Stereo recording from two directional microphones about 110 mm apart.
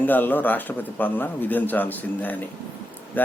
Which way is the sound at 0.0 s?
15° left (ahead or behind).